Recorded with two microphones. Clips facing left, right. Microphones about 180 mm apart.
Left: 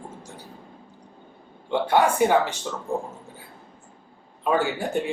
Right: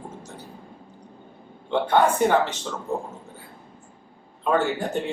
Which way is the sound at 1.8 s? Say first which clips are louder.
Even; 10° left (ahead or behind).